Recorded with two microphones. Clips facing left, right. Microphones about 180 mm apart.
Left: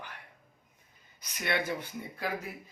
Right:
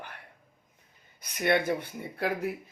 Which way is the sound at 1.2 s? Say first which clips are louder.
Right 6 dB; 55° right (ahead or behind).